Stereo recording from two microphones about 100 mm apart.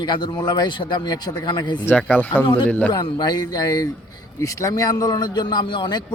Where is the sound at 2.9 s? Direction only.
45° left (ahead or behind).